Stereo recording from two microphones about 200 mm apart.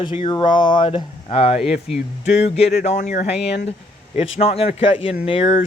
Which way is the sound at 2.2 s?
35° left (ahead or behind).